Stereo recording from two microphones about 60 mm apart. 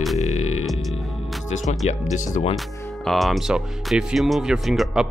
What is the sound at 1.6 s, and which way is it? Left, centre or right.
Speech, centre.